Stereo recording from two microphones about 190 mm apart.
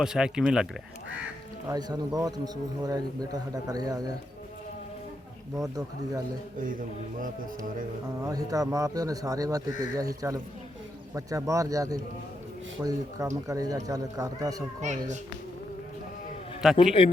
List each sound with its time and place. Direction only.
0.0 s speech: 5° right (ahead or behind)
1.6 s speech: 20° right (ahead or behind)
5.5 s speech: 20° right (ahead or behind)
8.2 s speech: 20° right (ahead or behind)
14.8 s speech: 40° right (ahead or behind)
16.6 s speech: centre (ahead or behind)